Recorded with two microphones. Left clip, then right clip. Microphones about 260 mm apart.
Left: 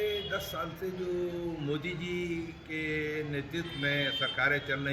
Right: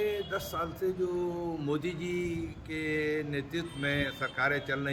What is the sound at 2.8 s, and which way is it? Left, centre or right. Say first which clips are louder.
A man's voice: right 3 dB; centre.